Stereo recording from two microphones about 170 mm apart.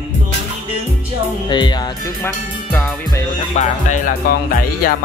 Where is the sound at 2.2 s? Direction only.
10° left (ahead or behind).